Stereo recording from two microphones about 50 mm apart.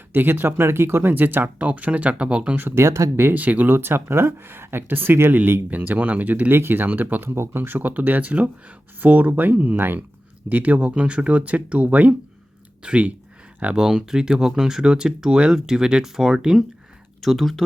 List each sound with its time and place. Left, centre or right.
0.1 s speech: right
1.5 s speech: right
2.7 s speech: right
3.3 s speech: right
3.7 s speech: right
5.7 s speech: right
6.5 s speech: right
7.3 s speech: right
10.5 s speech: right
13.7 s speech: centre
17.2 s speech: centre